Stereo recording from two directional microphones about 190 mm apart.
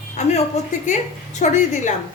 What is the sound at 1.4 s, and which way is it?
Speech, 40° left (ahead or behind).